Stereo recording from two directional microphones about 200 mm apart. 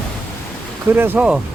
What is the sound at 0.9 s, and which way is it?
Speech, 10° right (ahead or behind).